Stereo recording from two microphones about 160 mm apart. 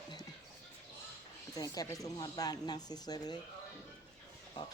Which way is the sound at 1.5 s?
20° left (ahead or behind).